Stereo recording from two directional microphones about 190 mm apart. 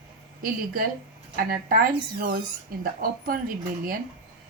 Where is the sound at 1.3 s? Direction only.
50° right (ahead or behind).